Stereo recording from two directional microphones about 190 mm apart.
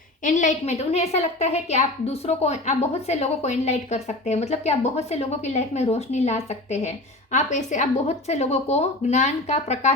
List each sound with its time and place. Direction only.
0.3 s a woman's voice: 40° left (ahead or behind)